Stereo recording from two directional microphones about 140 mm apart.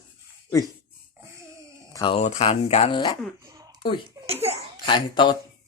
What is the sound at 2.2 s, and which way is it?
Speech, 50° left (ahead or behind).